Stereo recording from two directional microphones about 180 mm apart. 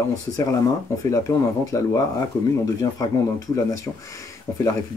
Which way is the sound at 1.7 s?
20° left (ahead or behind).